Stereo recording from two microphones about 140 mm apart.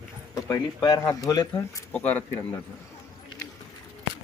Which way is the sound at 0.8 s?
30° left (ahead or behind).